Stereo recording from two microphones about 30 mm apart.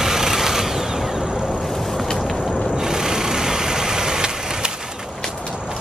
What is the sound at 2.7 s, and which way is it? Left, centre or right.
Vehicle, centre.